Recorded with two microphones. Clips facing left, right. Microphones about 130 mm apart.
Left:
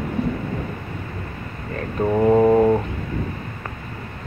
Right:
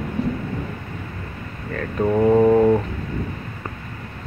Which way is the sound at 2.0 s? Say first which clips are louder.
Even; 5° left (ahead or behind).